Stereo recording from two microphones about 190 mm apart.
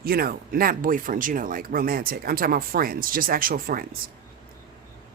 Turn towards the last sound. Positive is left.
turn(degrees=-50)  # may be behind; listen again after turning